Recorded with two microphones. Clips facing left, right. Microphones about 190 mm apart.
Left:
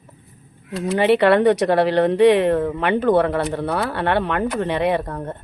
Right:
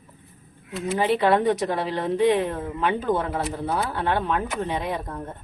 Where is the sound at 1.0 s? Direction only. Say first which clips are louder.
Left 6 dB; 70° left (ahead or behind).